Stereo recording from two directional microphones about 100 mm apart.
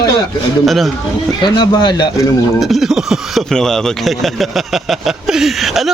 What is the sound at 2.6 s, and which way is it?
Speech, centre (ahead or behind).